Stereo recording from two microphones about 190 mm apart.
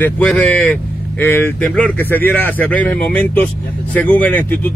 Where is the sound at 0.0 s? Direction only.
5° left (ahead or behind).